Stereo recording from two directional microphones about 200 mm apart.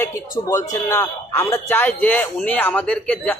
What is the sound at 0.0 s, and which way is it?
A man's voice, 15° left (ahead or behind).